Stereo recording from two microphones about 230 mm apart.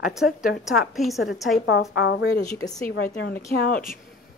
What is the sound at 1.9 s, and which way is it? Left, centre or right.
A woman's voice, left.